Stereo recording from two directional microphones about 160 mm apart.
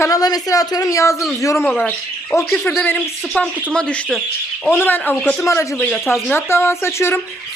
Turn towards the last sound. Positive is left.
turn(degrees=15)  # may be behind; listen again after turning